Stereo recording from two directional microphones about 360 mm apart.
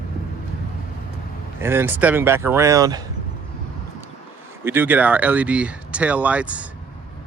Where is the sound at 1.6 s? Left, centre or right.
Centre.